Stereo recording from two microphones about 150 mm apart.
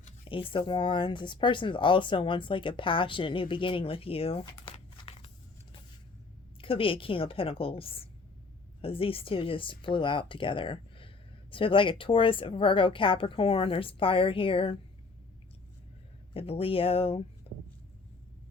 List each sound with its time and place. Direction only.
0.3 s speech: 35° left (ahead or behind)
5.0 s a sound: 40° left (ahead or behind)
6.6 s speech: 35° left (ahead or behind)
16.3 s speech: 40° left (ahead or behind)